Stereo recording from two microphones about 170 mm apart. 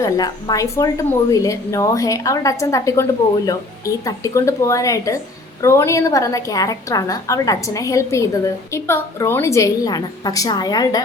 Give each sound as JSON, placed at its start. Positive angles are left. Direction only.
{"t": 0.0, "sound": "a woman's voice", "side_deg": 20}